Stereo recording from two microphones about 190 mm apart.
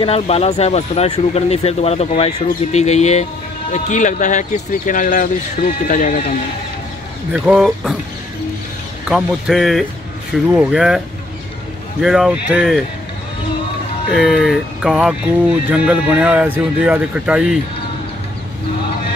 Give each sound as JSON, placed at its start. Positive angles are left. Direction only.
{"t": 0.0, "sound": "speech", "side_deg": 30}
{"t": 7.3, "sound": "speech", "side_deg": -5}
{"t": 9.1, "sound": "speech", "side_deg": 0}
{"t": 12.0, "sound": "speech", "side_deg": -5}
{"t": 14.1, "sound": "speech", "side_deg": 0}